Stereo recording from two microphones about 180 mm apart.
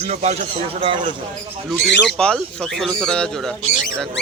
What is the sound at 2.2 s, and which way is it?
Speech, 5° left (ahead or behind).